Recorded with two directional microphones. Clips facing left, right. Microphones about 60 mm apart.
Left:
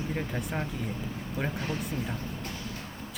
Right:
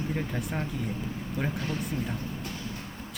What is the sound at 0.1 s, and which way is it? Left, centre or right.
Speech, centre.